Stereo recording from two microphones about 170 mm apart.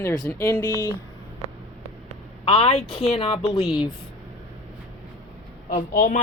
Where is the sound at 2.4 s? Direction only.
30° left (ahead or behind).